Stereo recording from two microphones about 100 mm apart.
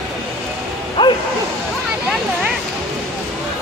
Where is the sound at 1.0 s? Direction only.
55° left (ahead or behind).